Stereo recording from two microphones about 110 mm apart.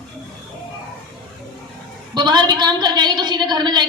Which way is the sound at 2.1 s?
40° right (ahead or behind).